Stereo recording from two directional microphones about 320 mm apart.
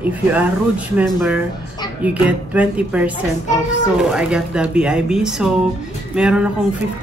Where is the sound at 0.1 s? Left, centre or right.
Centre.